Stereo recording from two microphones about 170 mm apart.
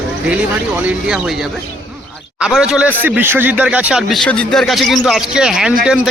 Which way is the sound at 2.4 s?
5° right (ahead or behind).